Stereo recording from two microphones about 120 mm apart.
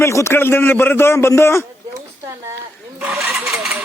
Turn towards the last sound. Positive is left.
turn(degrees=-5)  # may be behind; listen again after turning